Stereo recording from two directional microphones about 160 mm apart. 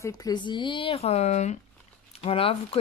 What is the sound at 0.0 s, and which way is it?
Speech, 25° left (ahead or behind).